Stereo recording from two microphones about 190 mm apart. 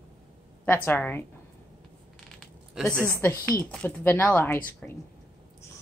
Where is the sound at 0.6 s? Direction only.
10° left (ahead or behind).